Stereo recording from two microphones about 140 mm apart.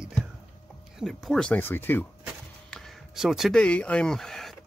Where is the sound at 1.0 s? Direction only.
Centre (ahead or behind).